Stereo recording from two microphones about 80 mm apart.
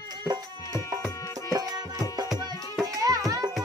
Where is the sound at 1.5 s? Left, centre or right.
Right.